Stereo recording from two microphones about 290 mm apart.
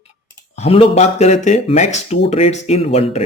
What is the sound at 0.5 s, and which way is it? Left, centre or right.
Speech, left.